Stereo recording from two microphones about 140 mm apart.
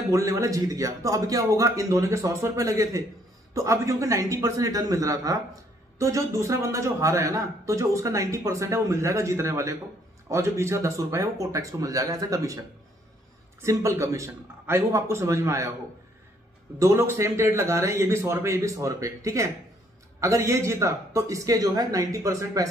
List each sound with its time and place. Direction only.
0.1 s a man's voice: 20° right (ahead or behind)
13.6 s a man's voice: 20° right (ahead or behind)
16.7 s a man's voice: 20° right (ahead or behind)